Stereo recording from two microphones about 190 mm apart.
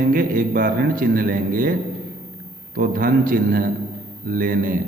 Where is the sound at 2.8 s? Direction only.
50° right (ahead or behind).